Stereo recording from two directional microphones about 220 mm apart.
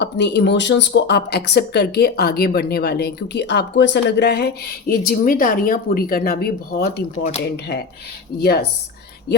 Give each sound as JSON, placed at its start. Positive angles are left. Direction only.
{"t": 0.0, "sound": "speech", "side_deg": 50}
{"t": 8.4, "sound": "speech", "side_deg": 45}